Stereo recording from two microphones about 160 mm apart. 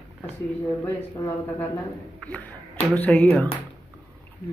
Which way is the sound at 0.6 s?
15° left (ahead or behind).